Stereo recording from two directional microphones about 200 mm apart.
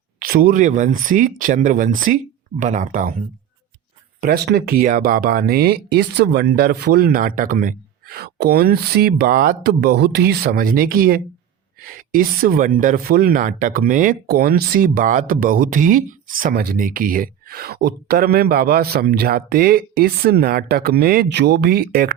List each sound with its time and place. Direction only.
0.2 s speech: 45° right (ahead or behind)
4.2 s speech: 50° right (ahead or behind)